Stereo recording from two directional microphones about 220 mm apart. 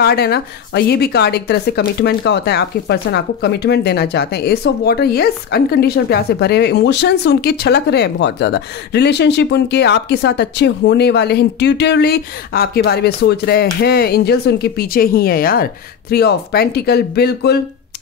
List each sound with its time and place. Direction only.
0.0 s a woman's voice: 45° left (ahead or behind)